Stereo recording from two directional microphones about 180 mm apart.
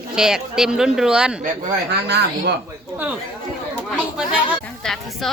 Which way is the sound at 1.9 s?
65° right (ahead or behind).